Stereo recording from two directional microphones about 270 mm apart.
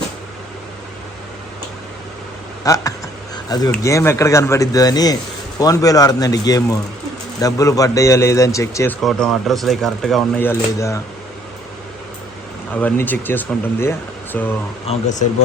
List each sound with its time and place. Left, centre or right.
2.6 s a man's voice: centre
12.7 s a man's voice: centre
14.9 s speech: left